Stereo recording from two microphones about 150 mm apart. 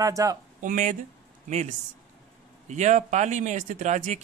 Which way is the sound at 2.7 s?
50° right (ahead or behind).